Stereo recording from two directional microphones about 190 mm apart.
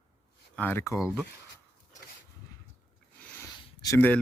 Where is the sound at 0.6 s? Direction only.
10° left (ahead or behind).